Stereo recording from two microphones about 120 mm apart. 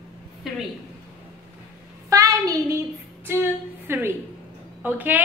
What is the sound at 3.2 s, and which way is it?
A woman's voice, 20° right (ahead or behind).